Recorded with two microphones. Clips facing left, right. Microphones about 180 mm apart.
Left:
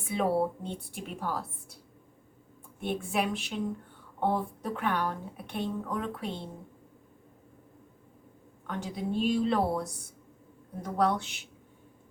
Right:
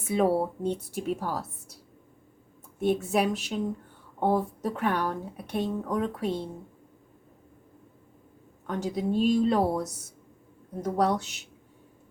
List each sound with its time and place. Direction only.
0.0 s a woman's voice: 45° right (ahead or behind)
2.8 s a woman's voice: 40° right (ahead or behind)
8.6 s a woman's voice: 40° right (ahead or behind)